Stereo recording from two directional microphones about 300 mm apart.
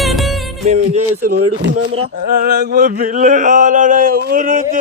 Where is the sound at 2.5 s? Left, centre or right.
Right.